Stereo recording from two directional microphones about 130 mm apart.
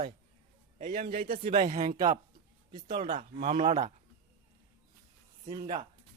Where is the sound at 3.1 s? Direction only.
75° right (ahead or behind).